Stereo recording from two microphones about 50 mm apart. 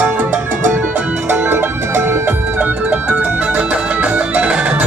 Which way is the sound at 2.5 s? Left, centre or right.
Right.